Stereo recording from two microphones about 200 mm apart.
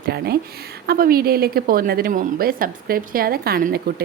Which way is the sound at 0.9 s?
45° right (ahead or behind).